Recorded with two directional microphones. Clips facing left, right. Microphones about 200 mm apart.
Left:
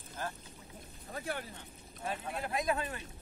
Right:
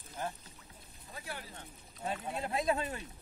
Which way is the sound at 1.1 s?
55° left (ahead or behind).